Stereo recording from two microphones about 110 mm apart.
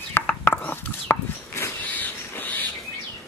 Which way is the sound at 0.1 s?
15° left (ahead or behind).